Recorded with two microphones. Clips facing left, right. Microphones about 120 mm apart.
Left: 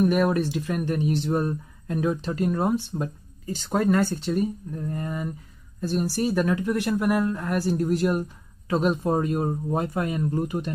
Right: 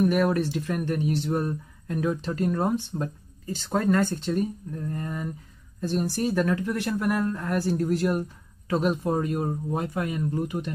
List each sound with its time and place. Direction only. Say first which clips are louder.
0.0 s speech: left 1 dB; 20° left (ahead or behind); by 10.7 s 35° left (ahead or behind)